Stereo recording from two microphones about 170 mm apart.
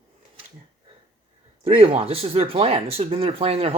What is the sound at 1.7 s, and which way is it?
Speech, 35° right (ahead or behind).